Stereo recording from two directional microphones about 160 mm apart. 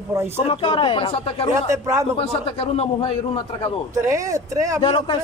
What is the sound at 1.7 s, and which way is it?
Speech, 20° right (ahead or behind).